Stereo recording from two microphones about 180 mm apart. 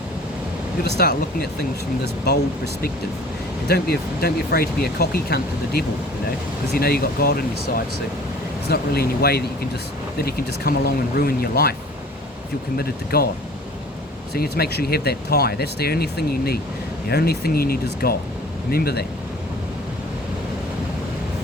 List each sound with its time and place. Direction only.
0.9 s speech: 60° left (ahead or behind)
3.7 s speech: 60° left (ahead or behind)
8.7 s speech: 60° left (ahead or behind)
12.7 s speech: 60° left (ahead or behind)
14.3 s speech: 60° left (ahead or behind)